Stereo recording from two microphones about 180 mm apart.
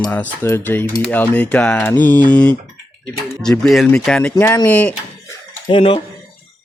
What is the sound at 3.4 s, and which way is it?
Speech, centre (ahead or behind).